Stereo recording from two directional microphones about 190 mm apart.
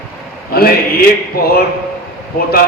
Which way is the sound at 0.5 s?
55° left (ahead or behind).